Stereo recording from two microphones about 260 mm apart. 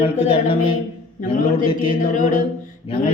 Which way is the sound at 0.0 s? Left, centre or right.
Left.